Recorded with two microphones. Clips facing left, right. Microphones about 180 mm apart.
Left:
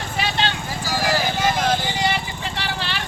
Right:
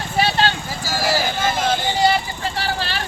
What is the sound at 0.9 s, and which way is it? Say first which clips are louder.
Vehicle: right 1 dB; 5° right (ahead or behind).